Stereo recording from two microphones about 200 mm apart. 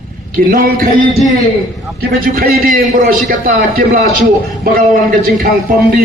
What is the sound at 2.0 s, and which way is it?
Speech, 50° right (ahead or behind).